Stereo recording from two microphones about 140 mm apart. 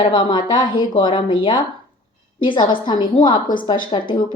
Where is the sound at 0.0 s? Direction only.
35° left (ahead or behind).